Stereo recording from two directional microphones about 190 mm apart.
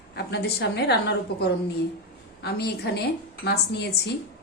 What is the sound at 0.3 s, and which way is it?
A woman's voice, 60° left (ahead or behind).